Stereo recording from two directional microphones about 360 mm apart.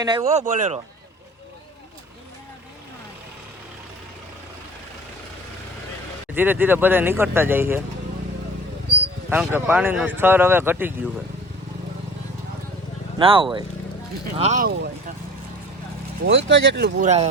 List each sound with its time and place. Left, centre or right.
0.0 s speech: centre
6.3 s speech: centre
9.3 s speech: centre
13.1 s speech: centre
16.2 s speech: right